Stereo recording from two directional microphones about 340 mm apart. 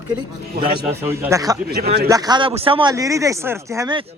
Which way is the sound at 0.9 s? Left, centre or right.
Centre.